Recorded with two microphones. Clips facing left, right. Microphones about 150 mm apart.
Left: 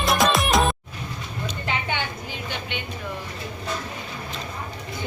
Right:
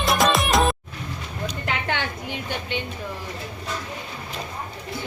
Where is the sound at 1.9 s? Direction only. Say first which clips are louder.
Right 2 dB; 80° right.